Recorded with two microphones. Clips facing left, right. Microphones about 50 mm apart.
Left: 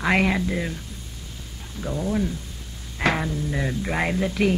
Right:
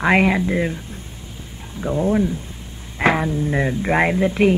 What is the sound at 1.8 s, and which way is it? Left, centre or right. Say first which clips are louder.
Speech: right 7 dB; right.